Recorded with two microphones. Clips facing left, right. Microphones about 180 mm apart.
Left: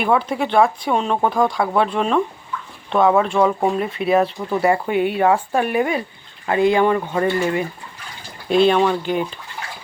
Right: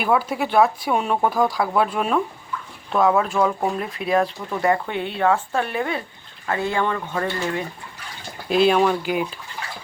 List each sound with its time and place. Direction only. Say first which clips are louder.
0.0 s speech: left 2 dB; 5° right (ahead or behind)
8.4 s speech: left 2 dB; 5° right (ahead or behind)